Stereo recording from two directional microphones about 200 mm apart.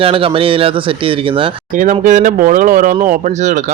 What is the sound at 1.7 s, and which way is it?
Speech, 40° right (ahead or behind).